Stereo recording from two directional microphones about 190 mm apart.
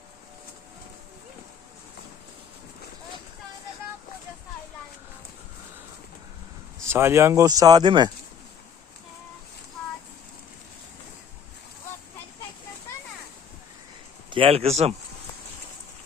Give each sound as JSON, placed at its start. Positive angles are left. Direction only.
{"t": 6.8, "sound": "speech", "side_deg": -15}
{"t": 14.3, "sound": "speech", "side_deg": -30}